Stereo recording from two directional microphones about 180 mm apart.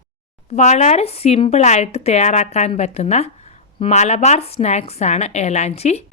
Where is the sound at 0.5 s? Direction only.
40° left (ahead or behind).